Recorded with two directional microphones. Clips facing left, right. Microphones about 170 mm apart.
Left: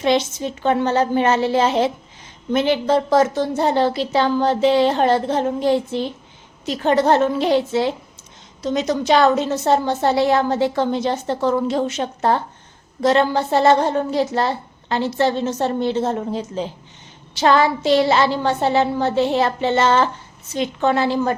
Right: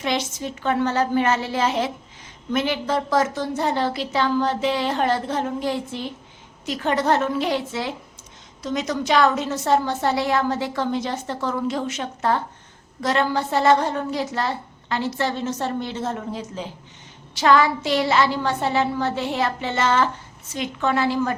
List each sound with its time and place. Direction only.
0.0 s a woman's voice: 25° left (ahead or behind)